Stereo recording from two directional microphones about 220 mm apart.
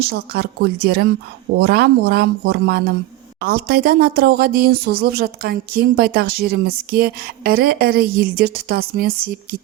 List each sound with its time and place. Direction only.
0.0 s speech: 45° right (ahead or behind)